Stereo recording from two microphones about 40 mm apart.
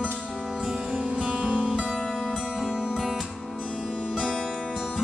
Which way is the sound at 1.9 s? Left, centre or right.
Centre.